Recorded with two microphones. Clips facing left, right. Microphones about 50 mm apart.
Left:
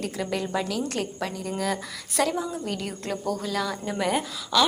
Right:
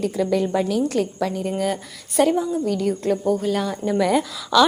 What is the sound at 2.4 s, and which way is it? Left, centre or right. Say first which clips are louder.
Speech: right 9 dB; left.